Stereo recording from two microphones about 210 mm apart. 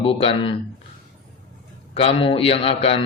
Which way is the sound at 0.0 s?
25° left (ahead or behind).